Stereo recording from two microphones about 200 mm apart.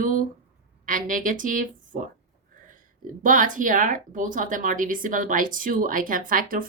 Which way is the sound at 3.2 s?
40° right (ahead or behind).